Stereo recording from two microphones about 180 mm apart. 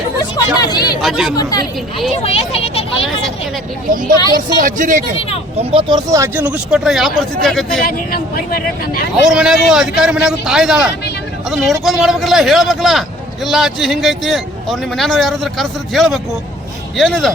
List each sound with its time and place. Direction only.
0.2 s a sound: 20° left (ahead or behind)
1.0 s a man's voice: 5° right (ahead or behind)
1.4 s speech: 20° left (ahead or behind)
2.1 s speech: 35° left (ahead or behind)
4.4 s speech: 50° right (ahead or behind)
5.5 s speech: 30° right (ahead or behind)
6.1 s a man's voice: 15° right (ahead or behind); by 7.6 s centre (ahead or behind)
7.9 s speech: 55° left (ahead or behind)
9.3 s a man's voice: 5° right (ahead or behind)